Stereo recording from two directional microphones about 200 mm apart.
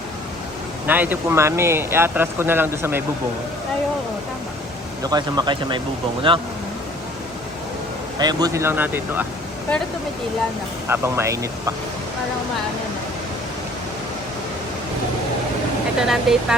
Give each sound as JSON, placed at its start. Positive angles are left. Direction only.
{"t": 0.9, "sound": "speech", "side_deg": -10}
{"t": 5.0, "sound": "speech", "side_deg": -20}
{"t": 8.2, "sound": "speech", "side_deg": -20}
{"t": 10.8, "sound": "speech", "side_deg": -10}
{"t": 16.0, "sound": "speech", "side_deg": 0}